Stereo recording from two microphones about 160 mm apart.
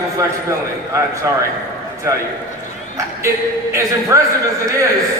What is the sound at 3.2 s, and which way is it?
Speech, 20° right (ahead or behind).